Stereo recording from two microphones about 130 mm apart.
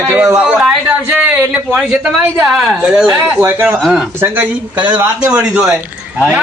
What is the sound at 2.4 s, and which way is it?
A man's voice, centre (ahead or behind).